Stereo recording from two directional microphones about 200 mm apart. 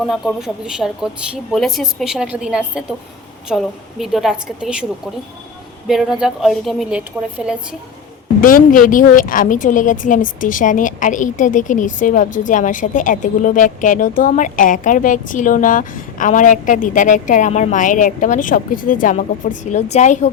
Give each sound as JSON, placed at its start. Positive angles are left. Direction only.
{"t": 0.0, "sound": "a woman's voice", "side_deg": 0}
{"t": 5.9, "sound": "a woman's voice", "side_deg": 0}
{"t": 8.4, "sound": "a woman's voice", "side_deg": 45}